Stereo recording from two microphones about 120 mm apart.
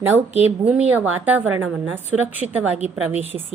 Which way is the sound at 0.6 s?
10° right (ahead or behind).